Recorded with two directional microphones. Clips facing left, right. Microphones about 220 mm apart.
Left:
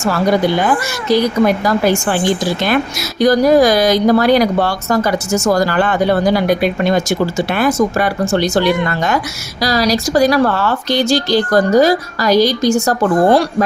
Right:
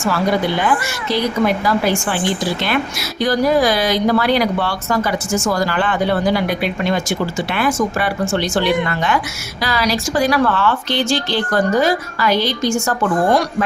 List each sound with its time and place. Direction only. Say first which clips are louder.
0.6 s a woman's voice: left 3 dB; 40° left (ahead or behind)